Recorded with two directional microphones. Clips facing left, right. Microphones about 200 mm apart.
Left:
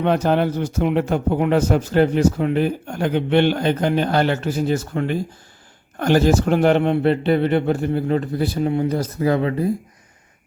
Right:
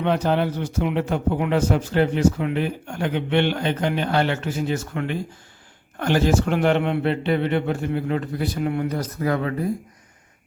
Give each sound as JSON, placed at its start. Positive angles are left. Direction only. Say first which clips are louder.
{"t": 0.0, "sound": "a man's voice", "louder": "left 3 dB", "side_deg": 45}